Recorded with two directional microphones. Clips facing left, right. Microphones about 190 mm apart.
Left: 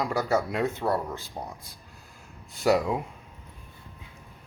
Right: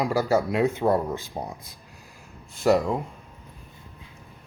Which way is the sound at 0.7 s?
20° right (ahead or behind).